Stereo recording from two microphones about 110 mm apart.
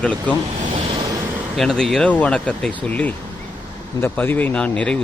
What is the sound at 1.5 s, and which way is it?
Speech, 5° left (ahead or behind).